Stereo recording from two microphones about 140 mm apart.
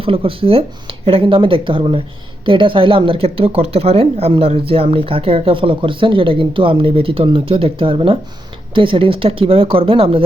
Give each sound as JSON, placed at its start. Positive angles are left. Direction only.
{"t": 0.0, "sound": "speech", "side_deg": -40}